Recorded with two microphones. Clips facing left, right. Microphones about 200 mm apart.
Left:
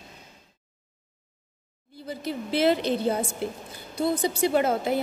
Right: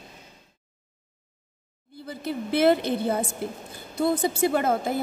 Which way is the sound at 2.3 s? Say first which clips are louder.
Right 2 dB; 55° right (ahead or behind).